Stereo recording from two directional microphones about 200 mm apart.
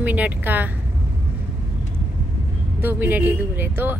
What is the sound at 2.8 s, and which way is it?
A woman's voice, 10° right (ahead or behind).